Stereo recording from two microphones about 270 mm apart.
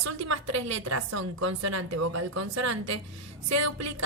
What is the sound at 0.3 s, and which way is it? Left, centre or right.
A woman's voice, right.